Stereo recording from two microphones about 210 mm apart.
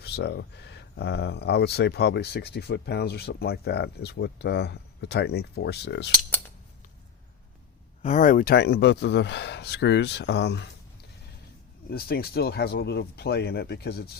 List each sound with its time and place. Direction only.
0.0 s speech: 50° left (ahead or behind)
8.0 s speech: 35° left (ahead or behind); by 10.7 s 55° left (ahead or behind)
11.9 s speech: 45° left (ahead or behind)